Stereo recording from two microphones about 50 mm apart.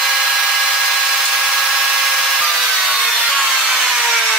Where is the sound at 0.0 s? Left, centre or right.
Centre.